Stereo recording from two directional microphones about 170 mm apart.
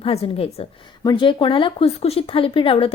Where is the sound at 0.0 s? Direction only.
35° left (ahead or behind).